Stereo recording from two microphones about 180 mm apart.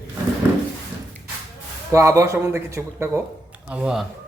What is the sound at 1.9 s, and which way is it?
Speech, 15° right (ahead or behind).